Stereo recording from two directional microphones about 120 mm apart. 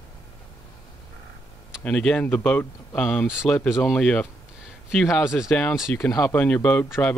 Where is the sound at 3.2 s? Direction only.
5° right (ahead or behind).